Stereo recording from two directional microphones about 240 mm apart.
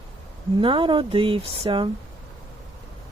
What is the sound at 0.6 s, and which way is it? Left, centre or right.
Speech, right.